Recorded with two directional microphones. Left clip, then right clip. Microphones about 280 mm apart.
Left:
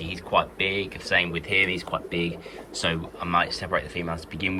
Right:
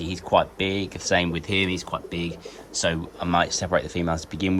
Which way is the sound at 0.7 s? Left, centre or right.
Centre.